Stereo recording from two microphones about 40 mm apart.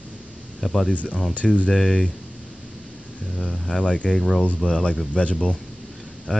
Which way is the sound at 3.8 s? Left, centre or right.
Left.